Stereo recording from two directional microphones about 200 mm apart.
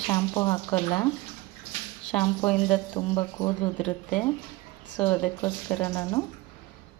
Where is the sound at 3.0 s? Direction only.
25° left (ahead or behind).